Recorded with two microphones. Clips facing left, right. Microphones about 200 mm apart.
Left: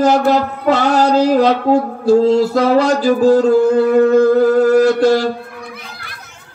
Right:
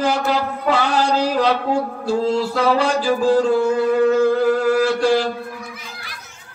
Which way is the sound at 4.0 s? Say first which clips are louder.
Left 6 dB; 40° left (ahead or behind).